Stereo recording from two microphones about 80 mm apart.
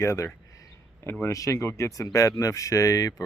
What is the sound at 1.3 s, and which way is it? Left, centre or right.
Speech, left.